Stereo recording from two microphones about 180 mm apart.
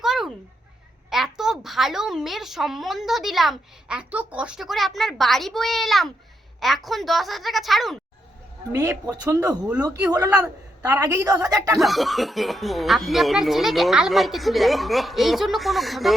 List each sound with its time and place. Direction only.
0.0 s a sound: centre (ahead or behind)
1.1 s a woman's voice: centre (ahead or behind)
8.8 s speech: 20° right (ahead or behind)
11.8 s a woman's voice: centre (ahead or behind)